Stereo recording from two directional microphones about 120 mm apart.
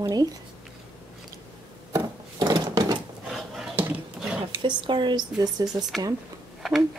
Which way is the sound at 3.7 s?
15° right (ahead or behind).